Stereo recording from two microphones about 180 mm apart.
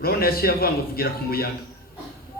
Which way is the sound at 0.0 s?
55° left (ahead or behind).